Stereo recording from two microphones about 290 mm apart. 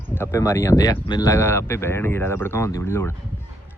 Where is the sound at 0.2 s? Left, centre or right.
Centre.